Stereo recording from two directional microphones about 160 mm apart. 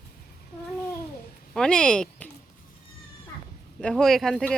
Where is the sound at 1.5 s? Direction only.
5° left (ahead or behind).